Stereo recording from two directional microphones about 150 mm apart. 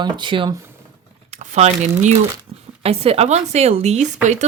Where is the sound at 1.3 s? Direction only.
50° right (ahead or behind).